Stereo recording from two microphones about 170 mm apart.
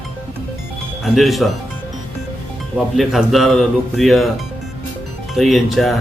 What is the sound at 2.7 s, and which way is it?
Speech, centre (ahead or behind).